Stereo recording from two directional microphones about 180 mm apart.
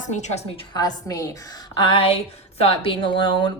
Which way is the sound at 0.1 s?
40° left (ahead or behind).